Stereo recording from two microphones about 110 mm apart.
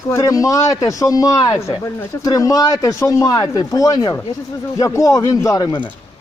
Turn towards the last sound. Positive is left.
turn(degrees=30)  # may be behind; listen again after turning